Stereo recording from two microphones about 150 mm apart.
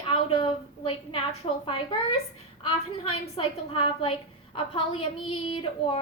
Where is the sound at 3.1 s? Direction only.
40° left (ahead or behind).